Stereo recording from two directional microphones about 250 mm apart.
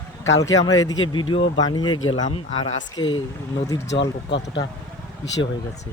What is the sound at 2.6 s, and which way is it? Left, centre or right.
Speech, centre.